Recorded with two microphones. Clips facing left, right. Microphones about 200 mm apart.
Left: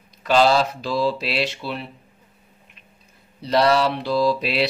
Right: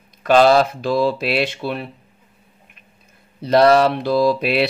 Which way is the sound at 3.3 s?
50° right (ahead or behind).